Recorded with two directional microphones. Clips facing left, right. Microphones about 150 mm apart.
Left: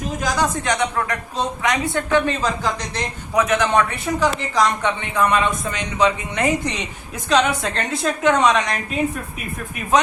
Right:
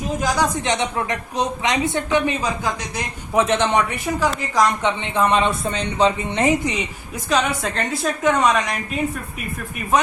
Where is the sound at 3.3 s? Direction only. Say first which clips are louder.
Right 1 dB; 25° right (ahead or behind).